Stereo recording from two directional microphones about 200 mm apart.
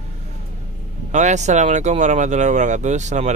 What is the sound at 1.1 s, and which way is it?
Speech, 35° right (ahead or behind).